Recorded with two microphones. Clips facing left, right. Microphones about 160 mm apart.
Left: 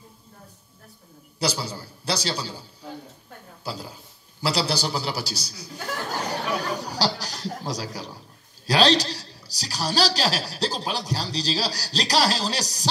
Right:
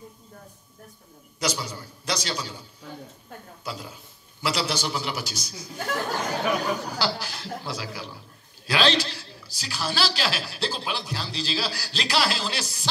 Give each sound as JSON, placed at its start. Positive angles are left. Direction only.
{"t": 1.4, "sound": "a man's voice", "side_deg": 35}
{"t": 3.6, "sound": "a man's voice", "side_deg": 35}
{"t": 6.2, "sound": "chatter", "side_deg": 35}
{"t": 8.6, "sound": "a man's voice", "side_deg": 35}